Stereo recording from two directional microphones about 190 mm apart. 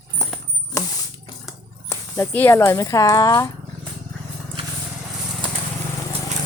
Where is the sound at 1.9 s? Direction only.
15° left (ahead or behind).